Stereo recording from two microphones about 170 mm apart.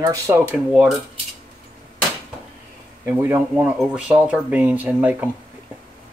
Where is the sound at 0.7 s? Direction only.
5° right (ahead or behind).